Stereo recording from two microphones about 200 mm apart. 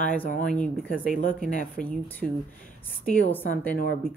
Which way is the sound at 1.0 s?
40° left (ahead or behind).